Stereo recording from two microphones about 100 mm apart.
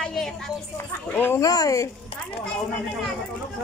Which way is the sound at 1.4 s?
40° left (ahead or behind).